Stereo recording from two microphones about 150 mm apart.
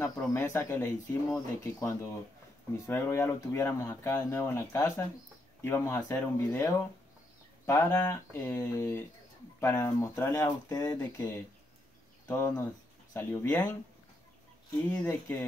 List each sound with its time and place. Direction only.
0.0 s speech: 15° left (ahead or behind)
15.0 s speech: 15° left (ahead or behind)